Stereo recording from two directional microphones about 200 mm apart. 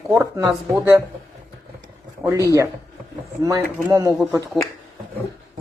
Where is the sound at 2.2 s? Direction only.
15° right (ahead or behind).